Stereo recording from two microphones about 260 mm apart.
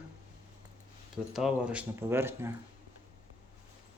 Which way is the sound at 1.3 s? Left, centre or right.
Centre.